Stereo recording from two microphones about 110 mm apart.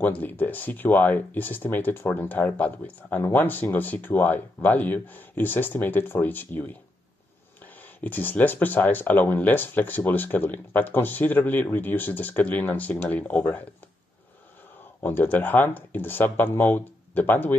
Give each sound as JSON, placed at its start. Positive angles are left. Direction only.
{"t": 0.0, "sound": "speech", "side_deg": 15}
{"t": 8.0, "sound": "speech", "side_deg": 15}
{"t": 15.0, "sound": "speech", "side_deg": 20}